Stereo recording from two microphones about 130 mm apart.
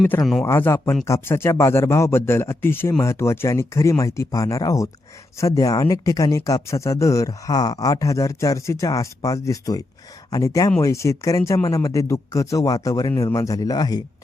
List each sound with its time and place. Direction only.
0.4 s speech: 20° left (ahead or behind)